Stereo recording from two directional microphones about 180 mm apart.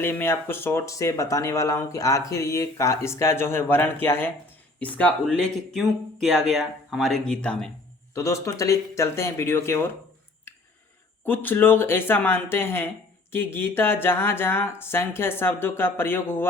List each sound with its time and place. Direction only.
0.0 s speech: 10° left (ahead or behind)
8.1 s speech: 15° left (ahead or behind)
10.5 s a sound: 10° left (ahead or behind)
11.3 s speech: 10° left (ahead or behind)